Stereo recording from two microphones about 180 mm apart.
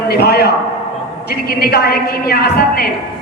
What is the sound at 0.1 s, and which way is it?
A woman's voice, 60° left (ahead or behind).